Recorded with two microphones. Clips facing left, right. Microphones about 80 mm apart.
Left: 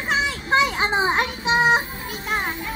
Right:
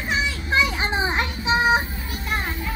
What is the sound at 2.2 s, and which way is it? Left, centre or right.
Music, left.